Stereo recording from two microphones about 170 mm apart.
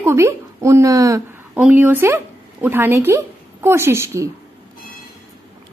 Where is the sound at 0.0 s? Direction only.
15° right (ahead or behind).